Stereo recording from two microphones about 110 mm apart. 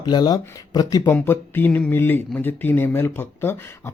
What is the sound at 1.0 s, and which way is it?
Speech, 20° left (ahead or behind).